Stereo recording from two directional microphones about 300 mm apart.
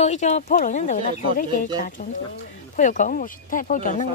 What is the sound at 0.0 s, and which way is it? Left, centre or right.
A woman's voice, left.